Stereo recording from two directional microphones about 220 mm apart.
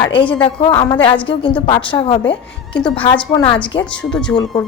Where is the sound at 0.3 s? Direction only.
20° left (ahead or behind).